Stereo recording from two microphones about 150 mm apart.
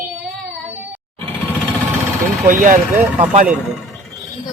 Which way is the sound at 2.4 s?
65° right (ahead or behind).